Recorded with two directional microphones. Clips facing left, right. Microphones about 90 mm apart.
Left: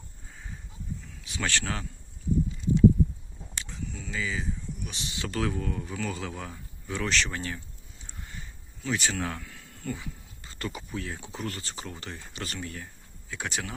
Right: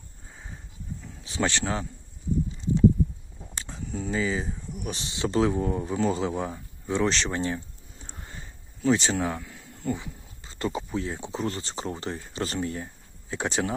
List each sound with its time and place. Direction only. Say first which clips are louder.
1.2 s speech: right 5 dB; 30° right (ahead or behind)
3.5 s speech: right 4 dB; 35° right (ahead or behind)
5.1 s speech: right 7 dB; 25° right (ahead or behind)